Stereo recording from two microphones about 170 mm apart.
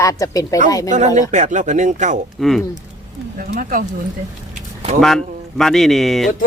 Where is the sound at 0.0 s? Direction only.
20° left (ahead or behind).